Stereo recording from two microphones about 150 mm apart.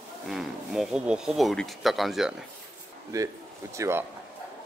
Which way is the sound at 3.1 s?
20° right (ahead or behind).